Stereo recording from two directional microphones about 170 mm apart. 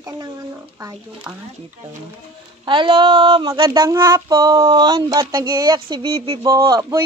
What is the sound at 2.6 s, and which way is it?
Child singing, 30° right (ahead or behind).